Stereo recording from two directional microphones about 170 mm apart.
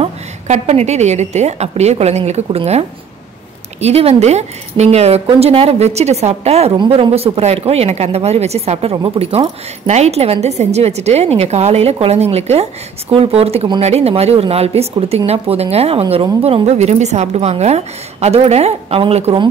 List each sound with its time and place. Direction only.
0.0 s a woman's voice: 40° right (ahead or behind)
3.8 s a woman's voice: 40° right (ahead or behind)